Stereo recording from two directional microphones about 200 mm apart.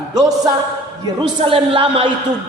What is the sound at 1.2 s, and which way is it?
Speech, 25° right (ahead or behind).